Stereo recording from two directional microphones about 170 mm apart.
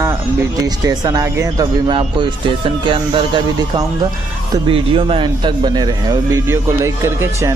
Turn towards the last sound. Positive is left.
turn(degrees=-15)  # may be behind; listen again after turning